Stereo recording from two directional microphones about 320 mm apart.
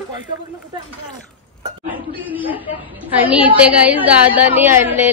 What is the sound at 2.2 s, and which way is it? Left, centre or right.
A woman's voice, centre.